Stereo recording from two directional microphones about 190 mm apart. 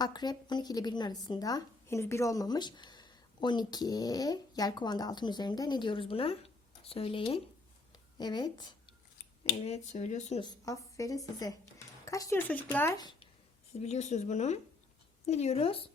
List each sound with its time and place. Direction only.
0.0 s a woman's voice: 20° left (ahead or behind)
9.6 s speech: 40° left (ahead or behind)
10.4 s a woman's voice: 15° left (ahead or behind)
13.0 s speech: 20° left (ahead or behind)
13.7 s speech: 35° left (ahead or behind)